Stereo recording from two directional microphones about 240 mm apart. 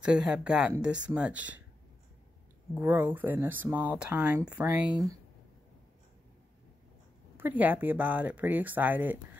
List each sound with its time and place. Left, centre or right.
0.0 s speech: centre
2.7 s speech: centre
7.3 s speech: centre